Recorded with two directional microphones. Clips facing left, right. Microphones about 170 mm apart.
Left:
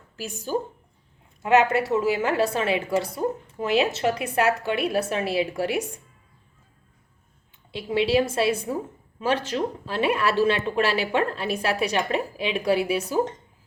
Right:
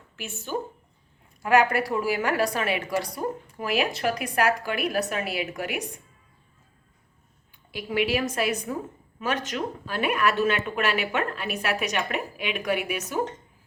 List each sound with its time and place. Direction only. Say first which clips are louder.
0.2 s a woman's voice: left 4 dB; 35° left (ahead or behind)
1.4 s a woman's voice: left 2 dB; 20° left (ahead or behind)
7.7 s a woman's voice: left 3 dB; 25° left (ahead or behind)